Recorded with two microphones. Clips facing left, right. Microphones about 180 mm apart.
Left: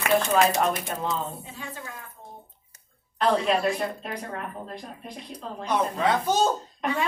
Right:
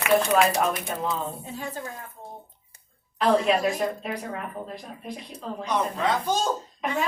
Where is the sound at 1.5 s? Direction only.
40° right (ahead or behind).